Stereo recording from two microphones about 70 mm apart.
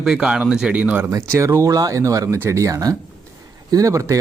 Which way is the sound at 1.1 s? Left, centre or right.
Right.